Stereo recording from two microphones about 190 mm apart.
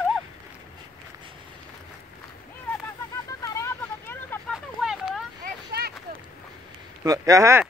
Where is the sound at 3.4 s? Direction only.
15° left (ahead or behind).